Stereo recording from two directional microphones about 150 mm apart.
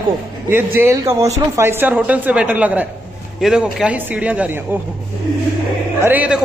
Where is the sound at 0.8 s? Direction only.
15° right (ahead or behind).